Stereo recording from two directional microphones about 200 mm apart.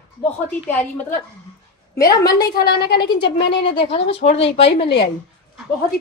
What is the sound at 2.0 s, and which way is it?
Speech, 20° left (ahead or behind).